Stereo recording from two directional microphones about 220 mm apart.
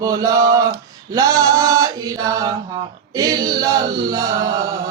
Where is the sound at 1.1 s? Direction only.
15° right (ahead or behind).